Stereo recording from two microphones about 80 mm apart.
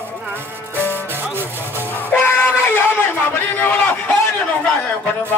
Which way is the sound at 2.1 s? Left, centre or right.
Left.